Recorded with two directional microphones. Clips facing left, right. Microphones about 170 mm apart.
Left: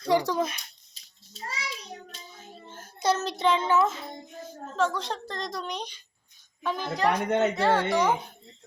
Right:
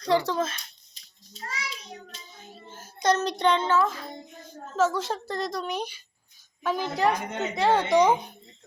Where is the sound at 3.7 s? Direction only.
20° left (ahead or behind).